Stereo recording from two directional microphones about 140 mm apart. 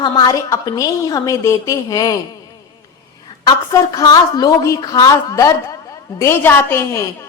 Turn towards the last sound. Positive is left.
turn(degrees=15)  # may be behind; listen again after turning